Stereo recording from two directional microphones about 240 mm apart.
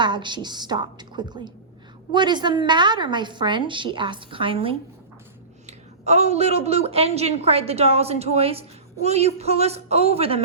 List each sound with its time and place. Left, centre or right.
0.0 s a woman's voice: centre